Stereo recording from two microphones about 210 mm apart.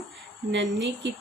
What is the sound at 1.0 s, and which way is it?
Speech, 55° right (ahead or behind).